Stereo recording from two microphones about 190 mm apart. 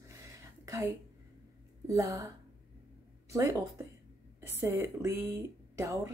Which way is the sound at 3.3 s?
15° right (ahead or behind).